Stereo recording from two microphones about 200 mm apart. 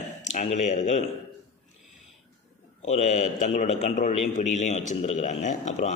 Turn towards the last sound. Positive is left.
turn(degrees=35)  # may be behind; listen again after turning